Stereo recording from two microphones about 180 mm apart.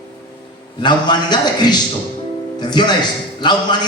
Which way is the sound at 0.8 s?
25° left (ahead or behind).